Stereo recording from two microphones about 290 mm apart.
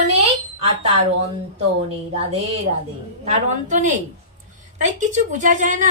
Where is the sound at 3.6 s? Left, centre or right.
Right.